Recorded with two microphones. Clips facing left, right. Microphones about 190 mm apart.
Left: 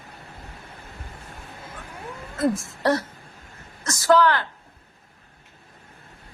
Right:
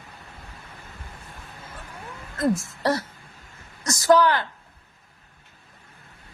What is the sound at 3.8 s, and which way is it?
Speech, 15° right (ahead or behind).